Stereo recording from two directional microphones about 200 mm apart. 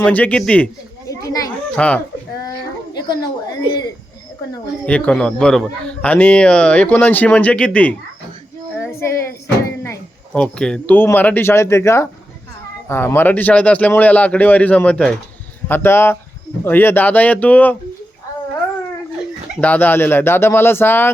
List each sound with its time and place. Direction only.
0.0 s a man's voice: 10° left (ahead or behind)
2.4 s a sound: 20° left (ahead or behind)
4.9 s a man's voice: 5° left (ahead or behind)
19.5 s a man's voice: 10° left (ahead or behind)